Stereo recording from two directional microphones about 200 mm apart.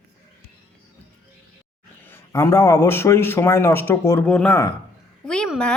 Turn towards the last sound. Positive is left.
turn(degrees=5)  # may be behind; listen again after turning